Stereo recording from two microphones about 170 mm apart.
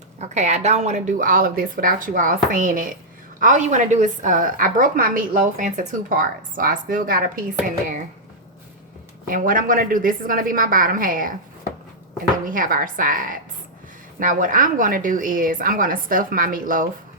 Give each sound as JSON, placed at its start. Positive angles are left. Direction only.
{"t": 0.2, "sound": "a woman's voice", "side_deg": -40}
{"t": 9.2, "sound": "a woman's voice", "side_deg": -55}
{"t": 12.5, "sound": "a woman's voice", "side_deg": -55}